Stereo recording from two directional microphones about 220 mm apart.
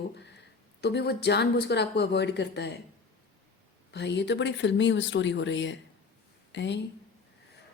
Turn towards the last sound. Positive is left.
turn(degrees=55)  # may be behind; listen again after turning